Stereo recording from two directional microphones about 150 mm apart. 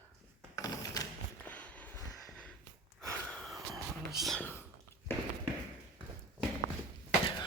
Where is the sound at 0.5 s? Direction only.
25° left (ahead or behind).